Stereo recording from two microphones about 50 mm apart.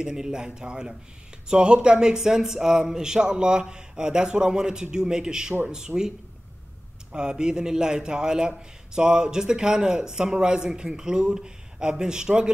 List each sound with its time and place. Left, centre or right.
0.0 s a man's voice: centre